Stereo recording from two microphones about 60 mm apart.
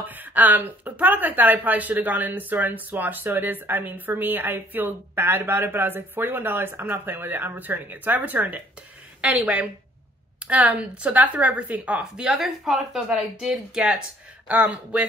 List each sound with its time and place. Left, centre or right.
0.0 s speech: right; by 14.0 s centre
14.5 s speech: right